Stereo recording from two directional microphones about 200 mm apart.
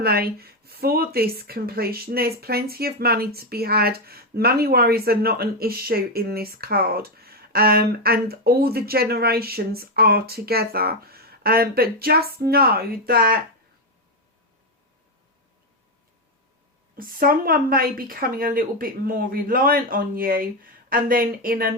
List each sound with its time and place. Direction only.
0.0 s speech: 50° right (ahead or behind)
16.9 s speech: 45° right (ahead or behind)